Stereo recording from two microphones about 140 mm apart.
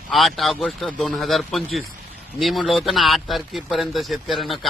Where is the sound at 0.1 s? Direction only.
Centre (ahead or behind).